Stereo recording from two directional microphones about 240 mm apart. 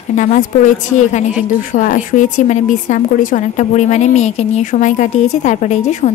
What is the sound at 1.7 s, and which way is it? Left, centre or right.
A woman's voice, left.